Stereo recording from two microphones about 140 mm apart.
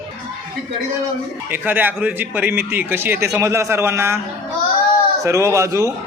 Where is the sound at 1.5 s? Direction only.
15° right (ahead or behind).